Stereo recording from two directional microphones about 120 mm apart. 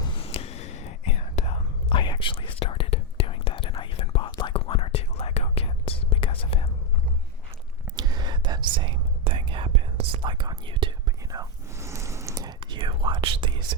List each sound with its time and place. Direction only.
0.0 s whispering: 45° left (ahead or behind)
4.5 s whispering: 50° left (ahead or behind)
7.9 s whispering: 35° right (ahead or behind)
11.3 s whispering: 25° right (ahead or behind)